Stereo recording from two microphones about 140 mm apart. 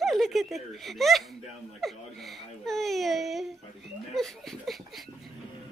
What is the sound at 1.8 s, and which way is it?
Speech, centre (ahead or behind).